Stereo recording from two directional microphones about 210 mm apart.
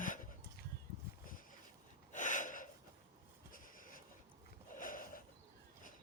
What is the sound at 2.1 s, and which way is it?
Gasp, 35° left (ahead or behind).